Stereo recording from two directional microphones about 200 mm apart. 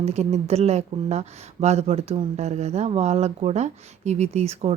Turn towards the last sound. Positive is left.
turn(degrees=-30)  # may be behind; listen again after turning